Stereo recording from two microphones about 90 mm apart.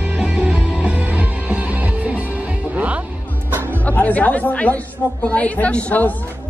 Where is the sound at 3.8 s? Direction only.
15° left (ahead or behind).